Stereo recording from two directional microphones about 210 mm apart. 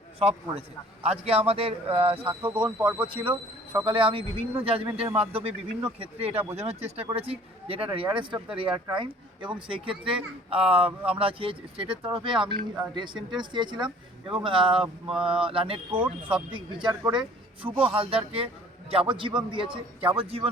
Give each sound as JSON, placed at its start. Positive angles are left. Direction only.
{"t": 0.2, "sound": "a man's voice", "side_deg": -30}
{"t": 2.6, "sound": "speech", "side_deg": -5}
{"t": 3.1, "sound": "a man's voice", "side_deg": -25}